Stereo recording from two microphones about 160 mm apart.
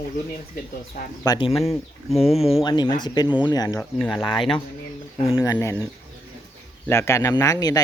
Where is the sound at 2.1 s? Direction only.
Centre (ahead or behind).